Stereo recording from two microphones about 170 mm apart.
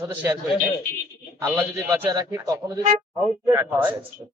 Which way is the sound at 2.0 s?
20° right (ahead or behind).